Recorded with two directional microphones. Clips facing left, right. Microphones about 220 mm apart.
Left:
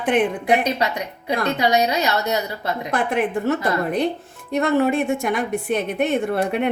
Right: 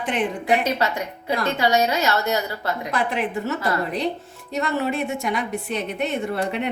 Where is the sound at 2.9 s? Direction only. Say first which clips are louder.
Left 4 dB; 50° left (ahead or behind).